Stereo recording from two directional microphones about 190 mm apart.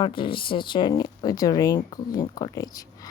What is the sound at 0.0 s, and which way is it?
Speech, 25° left (ahead or behind).